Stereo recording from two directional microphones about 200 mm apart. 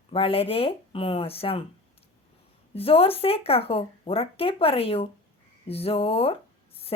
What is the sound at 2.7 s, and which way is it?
Speech, 30° left (ahead or behind).